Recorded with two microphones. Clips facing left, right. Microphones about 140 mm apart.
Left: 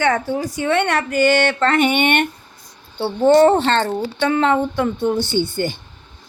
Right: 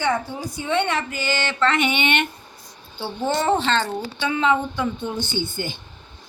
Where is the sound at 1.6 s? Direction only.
45° left (ahead or behind).